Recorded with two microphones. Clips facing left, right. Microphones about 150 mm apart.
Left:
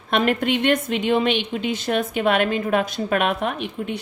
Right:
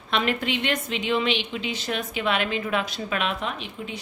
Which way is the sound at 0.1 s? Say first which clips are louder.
Left 5 dB; 50° left (ahead or behind).